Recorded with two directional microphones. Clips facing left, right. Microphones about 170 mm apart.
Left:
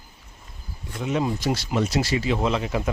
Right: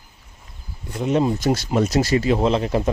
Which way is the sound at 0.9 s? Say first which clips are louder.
Right 5 dB; 35° right (ahead or behind).